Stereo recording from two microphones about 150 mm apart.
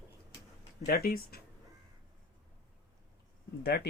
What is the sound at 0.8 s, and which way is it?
Speech, 75° left (ahead or behind).